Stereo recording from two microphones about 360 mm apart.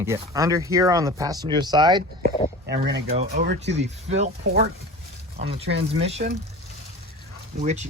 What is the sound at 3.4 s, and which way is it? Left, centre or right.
Speech, right.